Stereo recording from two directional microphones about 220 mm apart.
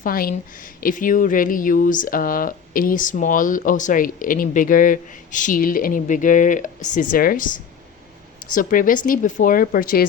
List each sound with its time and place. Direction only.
0.0 s speech: 40° left (ahead or behind)
8.5 s speech: 40° left (ahead or behind)